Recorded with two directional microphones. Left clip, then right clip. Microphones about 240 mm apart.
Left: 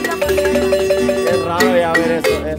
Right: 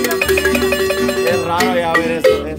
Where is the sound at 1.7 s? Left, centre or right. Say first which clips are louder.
Left 1 dB; right.